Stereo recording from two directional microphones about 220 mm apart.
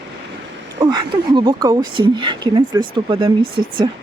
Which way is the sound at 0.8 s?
20° right (ahead or behind).